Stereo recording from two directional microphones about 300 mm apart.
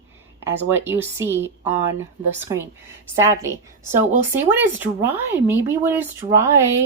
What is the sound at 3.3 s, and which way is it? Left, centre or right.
Speech, centre.